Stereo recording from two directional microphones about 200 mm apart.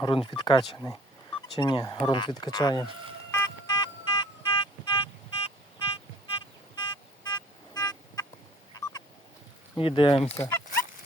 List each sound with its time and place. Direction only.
0.0 s speech: 25° left (ahead or behind)
3.3 s music: 25° left (ahead or behind)
8.7 s a sound: 20° left (ahead or behind)
9.7 s speech: 25° left (ahead or behind)
10.4 s fowl: 10° left (ahead or behind)